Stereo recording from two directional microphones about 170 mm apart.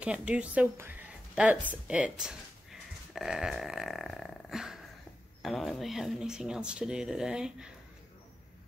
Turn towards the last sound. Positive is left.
turn(degrees=-5)  # may be behind; listen again after turning